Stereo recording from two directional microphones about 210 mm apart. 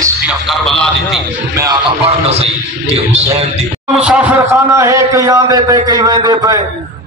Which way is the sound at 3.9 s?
5° right (ahead or behind).